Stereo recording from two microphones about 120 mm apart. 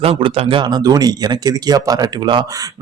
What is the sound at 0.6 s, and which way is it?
A man's voice, 35° right (ahead or behind).